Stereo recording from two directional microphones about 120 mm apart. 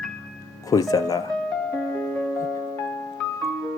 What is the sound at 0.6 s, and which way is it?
Speech, 30° left (ahead or behind).